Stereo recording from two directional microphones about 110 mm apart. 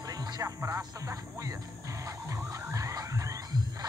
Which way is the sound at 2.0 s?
30° right (ahead or behind).